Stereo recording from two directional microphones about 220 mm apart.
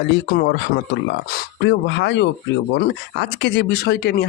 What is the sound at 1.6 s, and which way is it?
Speech, 55° left (ahead or behind).